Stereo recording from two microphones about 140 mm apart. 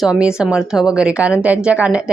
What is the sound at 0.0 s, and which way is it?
Speech, 5° right (ahead or behind).